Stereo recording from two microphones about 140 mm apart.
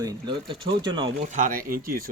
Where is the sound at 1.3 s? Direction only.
70° right (ahead or behind); by 2.1 s 90° right.